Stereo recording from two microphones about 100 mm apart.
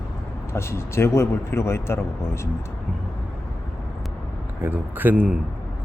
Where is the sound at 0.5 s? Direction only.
25° left (ahead or behind).